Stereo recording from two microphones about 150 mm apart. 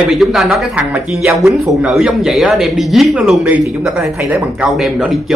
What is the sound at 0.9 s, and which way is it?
Speech, 15° right (ahead or behind).